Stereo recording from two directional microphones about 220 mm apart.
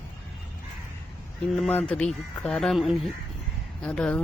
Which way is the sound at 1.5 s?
5° left (ahead or behind).